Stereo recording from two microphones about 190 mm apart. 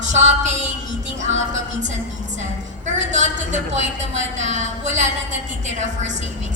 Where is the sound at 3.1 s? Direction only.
40° right (ahead or behind).